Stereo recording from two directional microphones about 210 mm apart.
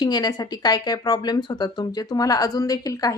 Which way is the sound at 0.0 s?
20° left (ahead or behind).